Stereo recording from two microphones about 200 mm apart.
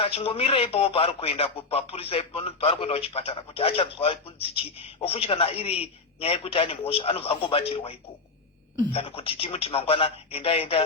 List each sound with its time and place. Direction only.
0.0 s speech: 30° left (ahead or behind)
8.9 s speech: 30° left (ahead or behind)